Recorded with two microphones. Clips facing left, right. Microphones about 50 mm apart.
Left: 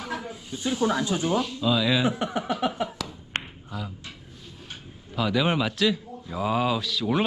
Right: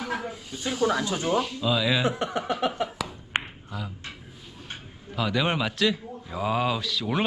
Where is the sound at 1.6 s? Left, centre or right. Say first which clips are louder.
Left 4 dB; centre.